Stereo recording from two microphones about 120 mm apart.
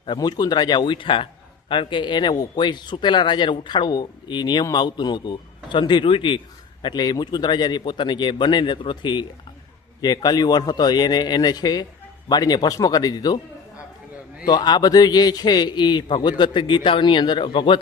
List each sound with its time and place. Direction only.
0.2 s a man's voice: 35° left (ahead or behind)